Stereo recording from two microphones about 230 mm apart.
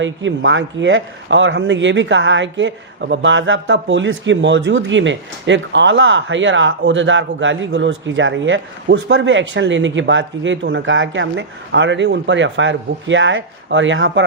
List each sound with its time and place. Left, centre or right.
0.0 s speech: right